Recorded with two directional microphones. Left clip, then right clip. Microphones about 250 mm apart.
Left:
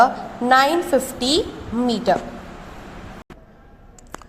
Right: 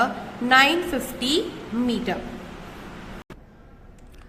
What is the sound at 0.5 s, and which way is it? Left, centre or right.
Speech, centre.